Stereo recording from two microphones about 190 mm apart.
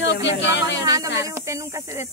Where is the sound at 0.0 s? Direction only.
70° left (ahead or behind).